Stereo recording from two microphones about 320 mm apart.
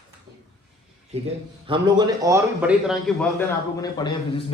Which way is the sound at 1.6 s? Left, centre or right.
Centre.